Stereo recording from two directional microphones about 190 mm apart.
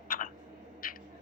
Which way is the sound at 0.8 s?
50° left (ahead or behind).